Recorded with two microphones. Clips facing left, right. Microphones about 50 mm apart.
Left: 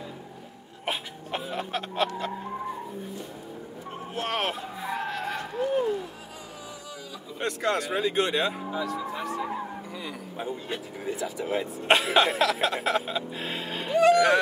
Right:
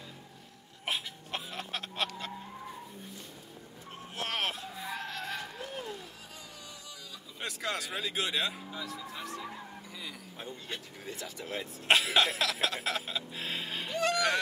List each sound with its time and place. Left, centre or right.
0.8 s a sound: centre
4.1 s speech: centre
7.3 s speech: centre
9.4 s vehicle: left
10.0 s speech: centre